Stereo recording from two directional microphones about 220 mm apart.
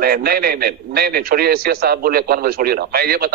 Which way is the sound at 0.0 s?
45° right (ahead or behind).